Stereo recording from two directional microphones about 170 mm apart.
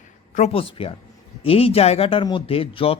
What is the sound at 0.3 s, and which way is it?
Speech, 35° left (ahead or behind).